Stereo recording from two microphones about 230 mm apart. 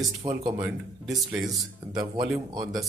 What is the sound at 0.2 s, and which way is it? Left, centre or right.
Speech, centre.